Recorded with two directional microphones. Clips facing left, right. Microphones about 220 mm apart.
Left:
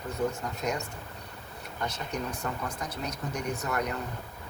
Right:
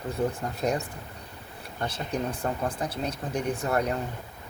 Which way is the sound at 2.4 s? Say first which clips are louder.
Right 5 dB; 35° right (ahead or behind).